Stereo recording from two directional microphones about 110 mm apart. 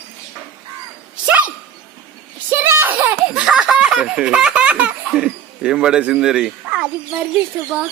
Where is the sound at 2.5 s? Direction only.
20° right (ahead or behind).